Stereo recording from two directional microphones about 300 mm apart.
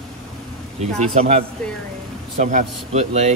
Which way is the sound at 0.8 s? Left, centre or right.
Right.